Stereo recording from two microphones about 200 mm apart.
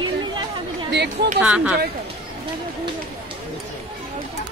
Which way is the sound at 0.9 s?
55° right (ahead or behind).